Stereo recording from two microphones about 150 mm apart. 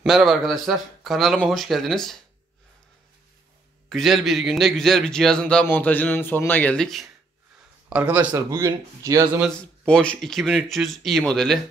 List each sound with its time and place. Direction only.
0.0 s speech: centre (ahead or behind)
3.9 s speech: centre (ahead or behind)
7.9 s speech: 10° right (ahead or behind)
8.3 s speech: 20° right (ahead or behind)
9.5 s speech: 5° left (ahead or behind)